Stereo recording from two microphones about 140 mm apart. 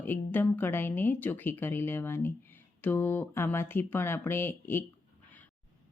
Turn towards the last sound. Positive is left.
turn(degrees=15)  # may be behind; listen again after turning